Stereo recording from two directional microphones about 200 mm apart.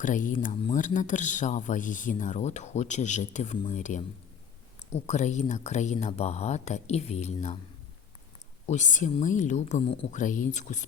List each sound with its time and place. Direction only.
0.0 s speech: 40° left (ahead or behind)
8.6 s speech: 35° left (ahead or behind)